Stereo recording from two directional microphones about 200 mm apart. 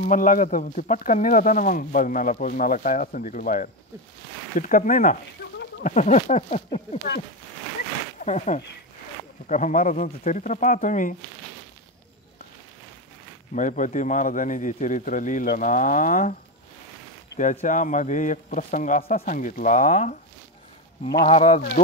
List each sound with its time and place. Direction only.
0.0 s speech: 40° left (ahead or behind)
8.2 s speech: 35° left (ahead or behind)
13.6 s speech: 40° left (ahead or behind)
17.4 s speech: 40° left (ahead or behind)
21.3 s speech: 30° left (ahead or behind)